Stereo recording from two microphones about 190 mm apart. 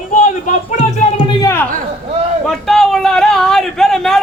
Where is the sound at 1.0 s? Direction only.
35° left (ahead or behind).